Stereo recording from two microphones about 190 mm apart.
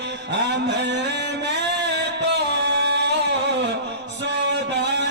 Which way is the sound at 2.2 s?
65° right (ahead or behind).